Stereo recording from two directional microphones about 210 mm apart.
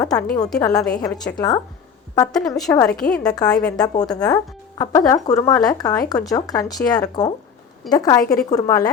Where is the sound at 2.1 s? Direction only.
5° left (ahead or behind).